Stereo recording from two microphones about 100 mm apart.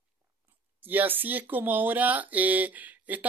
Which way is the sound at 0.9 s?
20° right (ahead or behind).